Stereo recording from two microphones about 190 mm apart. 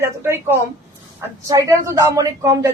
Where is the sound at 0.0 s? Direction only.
15° right (ahead or behind).